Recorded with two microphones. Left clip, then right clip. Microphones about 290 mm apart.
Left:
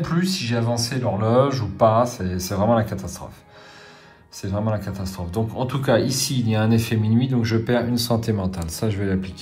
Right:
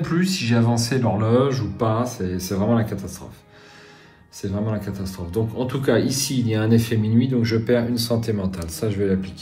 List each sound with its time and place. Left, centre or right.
0.0 s speech: centre
4.4 s speech: left